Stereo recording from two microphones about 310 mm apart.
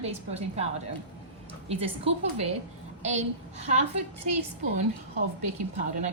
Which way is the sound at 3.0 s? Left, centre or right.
Right.